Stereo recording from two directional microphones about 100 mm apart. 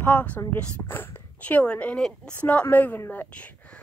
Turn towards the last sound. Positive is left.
turn(degrees=15)  # may be behind; listen again after turning